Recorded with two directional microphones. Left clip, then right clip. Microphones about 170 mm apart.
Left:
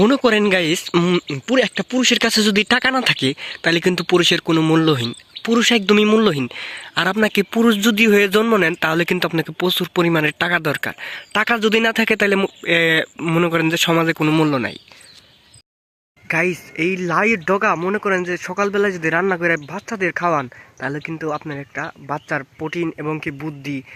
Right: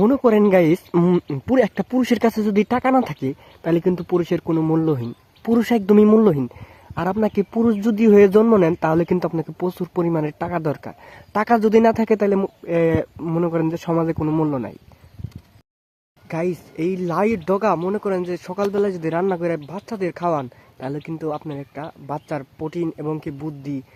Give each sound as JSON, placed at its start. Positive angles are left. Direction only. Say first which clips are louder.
{"t": 0.0, "sound": "speech", "louder": "left 1 dB", "side_deg": 25}
{"t": 1.0, "sound": "speech", "louder": "left 1 dB", "side_deg": -10}
{"t": 2.3, "sound": "speech", "louder": "left 5 dB", "side_deg": 20}
{"t": 4.4, "sound": "speech", "louder": "left 4 dB", "side_deg": 15}
{"t": 5.5, "sound": "speech", "louder": "left 4 dB", "side_deg": -10}
{"t": 5.9, "sound": "speech", "louder": "right 4 dB", "side_deg": 5}
{"t": 11.0, "sound": "speech", "louder": "left 2 dB", "side_deg": 0}
{"t": 11.8, "sound": "speech", "louder": "even", "side_deg": 15}
{"t": 16.3, "sound": "speech", "louder": "left 6 dB", "side_deg": 0}
{"t": 17.7, "sound": "speech", "louder": "left 3 dB", "side_deg": 5}
{"t": 21.2, "sound": "speech", "louder": "left 1 dB", "side_deg": 15}